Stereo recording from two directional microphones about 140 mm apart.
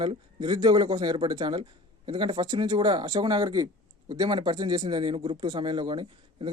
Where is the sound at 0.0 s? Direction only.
35° right (ahead or behind).